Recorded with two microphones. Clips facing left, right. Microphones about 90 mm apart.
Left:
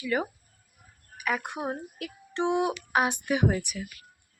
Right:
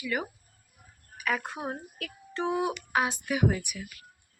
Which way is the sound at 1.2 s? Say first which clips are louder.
Left 1 dB; 10° left (ahead or behind).